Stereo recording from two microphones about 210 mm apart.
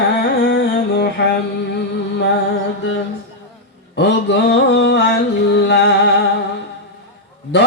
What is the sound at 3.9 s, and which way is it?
Music, 55° left (ahead or behind).